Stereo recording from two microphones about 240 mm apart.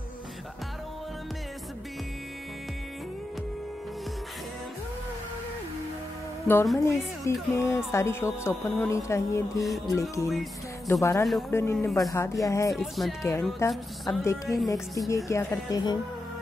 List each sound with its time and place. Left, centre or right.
6.4 s speech: centre
12.7 s speech: centre
13.2 s speech: centre
14.2 s speech: centre